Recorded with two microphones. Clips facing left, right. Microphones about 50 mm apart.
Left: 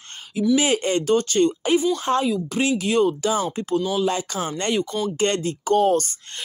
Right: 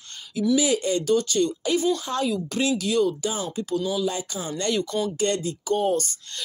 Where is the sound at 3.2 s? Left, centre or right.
Left.